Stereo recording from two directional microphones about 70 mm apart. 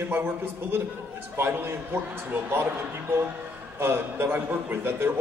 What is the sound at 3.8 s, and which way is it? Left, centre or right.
A man's voice, right.